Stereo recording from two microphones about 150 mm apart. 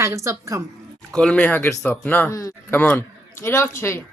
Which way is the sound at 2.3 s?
20° left (ahead or behind).